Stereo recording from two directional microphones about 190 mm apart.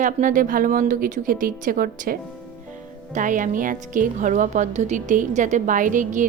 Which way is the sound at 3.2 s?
45° right (ahead or behind).